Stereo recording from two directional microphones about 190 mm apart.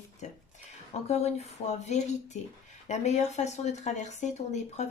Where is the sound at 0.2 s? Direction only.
40° left (ahead or behind).